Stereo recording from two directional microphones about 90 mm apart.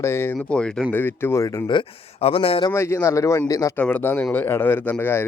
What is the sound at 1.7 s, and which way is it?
Speech, 75° left (ahead or behind).